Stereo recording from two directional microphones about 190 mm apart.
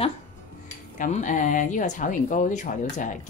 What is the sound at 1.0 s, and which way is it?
Speech, 40° left (ahead or behind).